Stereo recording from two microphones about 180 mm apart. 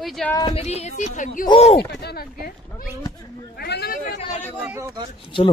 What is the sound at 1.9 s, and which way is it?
Speech, 65° left (ahead or behind).